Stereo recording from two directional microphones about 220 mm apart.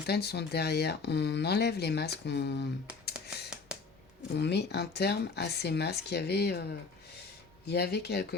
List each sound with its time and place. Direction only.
0.0 s speech: 45° left (ahead or behind)
2.8 s a sound: 5° right (ahead or behind)
4.4 s speech: 50° left (ahead or behind)
7.7 s speech: 45° left (ahead or behind)